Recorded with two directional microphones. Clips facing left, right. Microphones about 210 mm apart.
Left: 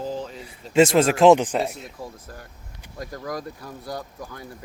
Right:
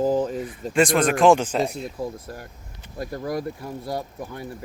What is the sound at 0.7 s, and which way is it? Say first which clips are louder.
Speech: left 3 dB; 25° left (ahead or behind).